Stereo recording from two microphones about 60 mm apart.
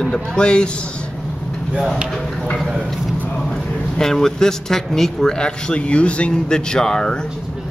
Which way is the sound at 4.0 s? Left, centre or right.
Centre.